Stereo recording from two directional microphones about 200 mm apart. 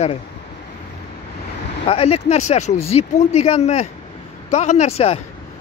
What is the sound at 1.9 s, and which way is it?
Speech, 30° left (ahead or behind).